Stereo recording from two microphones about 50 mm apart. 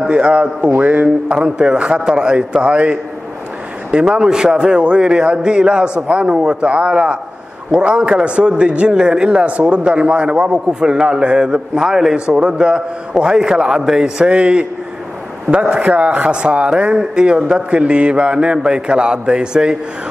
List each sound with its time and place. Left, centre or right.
0.1 s a man's voice: right
0.7 s mantra: right
1.3 s a man's voice: centre
12.3 s a man's voice: centre
15.7 s a man's voice: right